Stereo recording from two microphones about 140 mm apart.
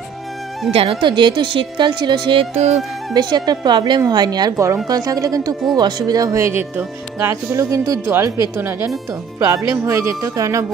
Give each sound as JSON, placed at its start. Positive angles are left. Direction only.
{"t": 0.7, "sound": "a woman's voice", "side_deg": -40}
{"t": 2.5, "sound": "speech", "side_deg": -55}
{"t": 3.1, "sound": "speech", "side_deg": -30}